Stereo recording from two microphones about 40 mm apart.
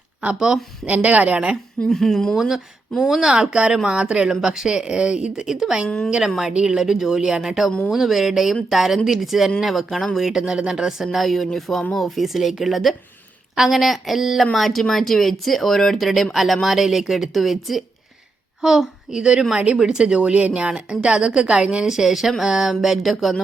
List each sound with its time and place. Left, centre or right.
0.3 s speech: centre
0.9 s speech: right
1.9 s speech: centre
3.1 s a woman's voice: centre
4.3 s a woman's voice: centre
19.2 s a woman's voice: right
19.8 s speech: centre
20.1 s a woman's voice: right
21.8 s speech: centre
22.8 s speech: centre